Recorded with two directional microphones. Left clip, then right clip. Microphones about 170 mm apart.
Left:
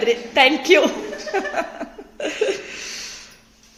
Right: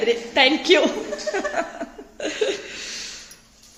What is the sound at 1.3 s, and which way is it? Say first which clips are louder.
Chuckle: left 2 dB; centre (ahead or behind).